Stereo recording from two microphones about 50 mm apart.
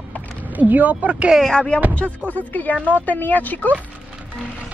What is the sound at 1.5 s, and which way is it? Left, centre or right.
Speech, centre.